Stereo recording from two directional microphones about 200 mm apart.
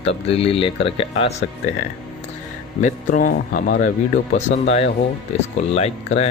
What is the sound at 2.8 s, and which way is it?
Speech, 40° left (ahead or behind).